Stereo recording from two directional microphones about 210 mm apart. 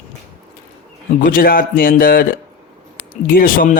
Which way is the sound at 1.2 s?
40° left (ahead or behind).